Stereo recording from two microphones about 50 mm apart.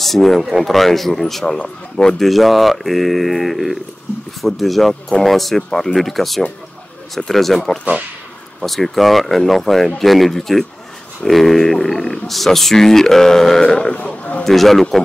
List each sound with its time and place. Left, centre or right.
0.0 s speech: centre
2.1 s speech: centre
14.0 s a sound: left
14.4 s speech: centre